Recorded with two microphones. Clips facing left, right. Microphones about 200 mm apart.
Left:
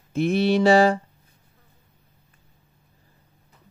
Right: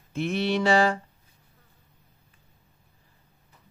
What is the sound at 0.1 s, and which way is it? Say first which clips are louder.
Speech: left 6 dB; 40° left (ahead or behind).